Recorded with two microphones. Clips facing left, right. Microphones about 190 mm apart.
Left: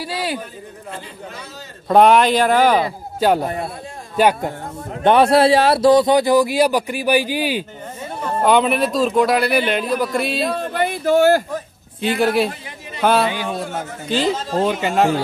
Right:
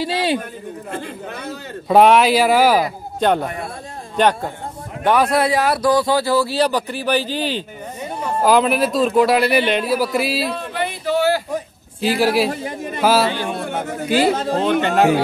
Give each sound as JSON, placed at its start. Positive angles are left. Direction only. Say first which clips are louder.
{"t": 0.0, "sound": "speech", "louder": "right 5 dB", "side_deg": -25}
{"t": 1.9, "sound": "speech", "louder": "even", "side_deg": 0}
{"t": 3.2, "sound": "speech", "louder": "left 1 dB", "side_deg": 5}
{"t": 5.0, "sound": "speech", "louder": "left 4 dB", "side_deg": 25}
{"t": 8.2, "sound": "speech", "louder": "even", "side_deg": 0}
{"t": 10.6, "sound": "a sound", "louder": "left 4 dB", "side_deg": 45}
{"t": 12.0, "sound": "speech", "louder": "even", "side_deg": 0}
{"t": 12.4, "sound": "a man's voice", "louder": "right 6 dB", "side_deg": -50}
{"t": 13.0, "sound": "speech", "louder": "even", "side_deg": -5}
{"t": 13.6, "sound": "a sound", "louder": "right 1 dB", "side_deg": -60}
{"t": 14.0, "sound": "speech", "louder": "right 3 dB", "side_deg": -10}
{"t": 14.6, "sound": "speech", "louder": "even", "side_deg": 5}